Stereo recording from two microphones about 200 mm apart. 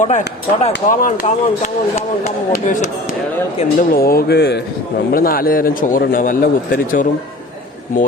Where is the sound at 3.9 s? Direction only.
50° left (ahead or behind).